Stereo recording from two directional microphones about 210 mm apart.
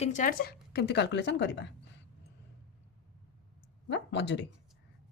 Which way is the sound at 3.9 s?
55° left (ahead or behind).